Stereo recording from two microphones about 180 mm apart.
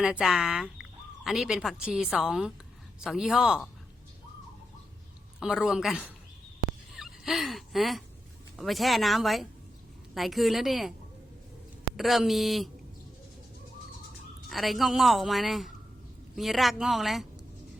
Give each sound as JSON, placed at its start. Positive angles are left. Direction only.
{"t": 0.0, "sound": "a woman's voice", "side_deg": -5}
{"t": 5.4, "sound": "a woman's voice", "side_deg": -5}
{"t": 7.0, "sound": "a sound", "side_deg": 0}
{"t": 8.5, "sound": "a woman's voice", "side_deg": 0}
{"t": 11.9, "sound": "a woman's voice", "side_deg": 0}
{"t": 14.5, "sound": "a woman's voice", "side_deg": 0}